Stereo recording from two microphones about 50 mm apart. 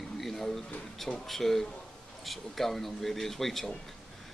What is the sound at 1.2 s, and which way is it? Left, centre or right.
Speech, centre.